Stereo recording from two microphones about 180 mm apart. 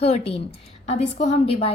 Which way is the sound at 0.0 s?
35° left (ahead or behind).